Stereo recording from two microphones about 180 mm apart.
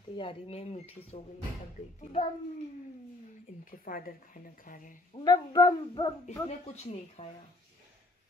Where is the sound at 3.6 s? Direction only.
50° left (ahead or behind).